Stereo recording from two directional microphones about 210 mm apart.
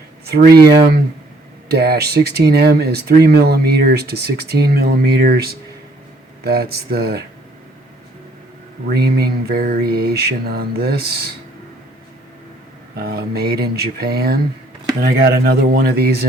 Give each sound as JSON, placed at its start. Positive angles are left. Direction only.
{"t": 0.3, "sound": "speech", "side_deg": -50}
{"t": 8.9, "sound": "speech", "side_deg": -50}
{"t": 13.0, "sound": "speech", "side_deg": -45}